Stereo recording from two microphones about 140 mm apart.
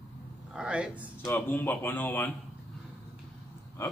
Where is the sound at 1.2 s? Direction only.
15° left (ahead or behind).